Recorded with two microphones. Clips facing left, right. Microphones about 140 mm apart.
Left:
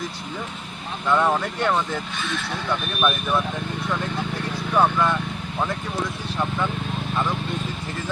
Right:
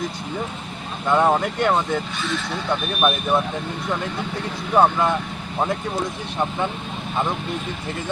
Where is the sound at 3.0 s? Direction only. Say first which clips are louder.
Right 3 dB; 25° right (ahead or behind).